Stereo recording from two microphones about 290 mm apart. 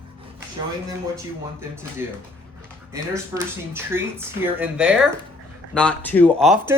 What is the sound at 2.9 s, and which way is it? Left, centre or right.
Speech, centre.